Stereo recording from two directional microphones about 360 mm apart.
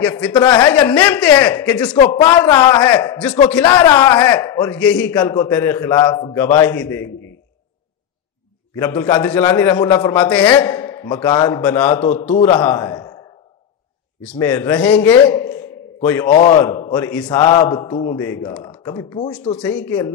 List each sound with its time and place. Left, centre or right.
0.0 s a man's voice: centre
2.0 s a man's voice: centre
8.7 s a man's voice: centre
14.3 s a man's voice: centre
16.3 s a man's voice: left
16.5 s a man's voice: centre